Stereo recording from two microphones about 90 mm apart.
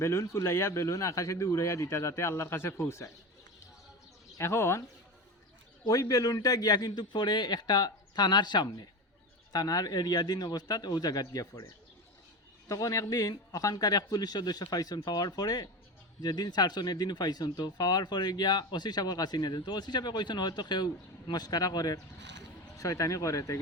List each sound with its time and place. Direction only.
0.0 s speech: 30° left (ahead or behind)
4.4 s speech: 30° left (ahead or behind)
5.9 s speech: 40° left (ahead or behind)